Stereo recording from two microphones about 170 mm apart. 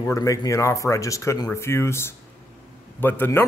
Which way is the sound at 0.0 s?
20° left (ahead or behind).